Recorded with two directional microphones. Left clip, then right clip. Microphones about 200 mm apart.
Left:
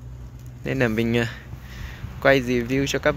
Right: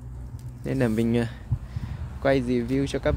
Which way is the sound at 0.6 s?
10° right (ahead or behind).